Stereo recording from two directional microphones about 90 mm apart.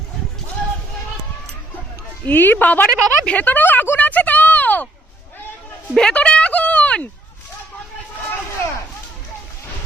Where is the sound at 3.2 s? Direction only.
15° left (ahead or behind).